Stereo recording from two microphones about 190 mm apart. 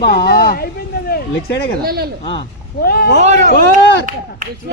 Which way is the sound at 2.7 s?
55° left (ahead or behind).